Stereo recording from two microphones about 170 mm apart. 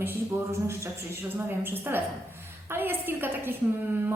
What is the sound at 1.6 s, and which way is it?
A woman's voice, 10° right (ahead or behind).